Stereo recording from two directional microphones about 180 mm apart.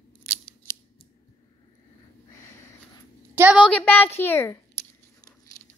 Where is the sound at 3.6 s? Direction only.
10° left (ahead or behind).